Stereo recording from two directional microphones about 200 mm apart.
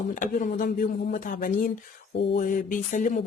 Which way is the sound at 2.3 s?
45° left (ahead or behind).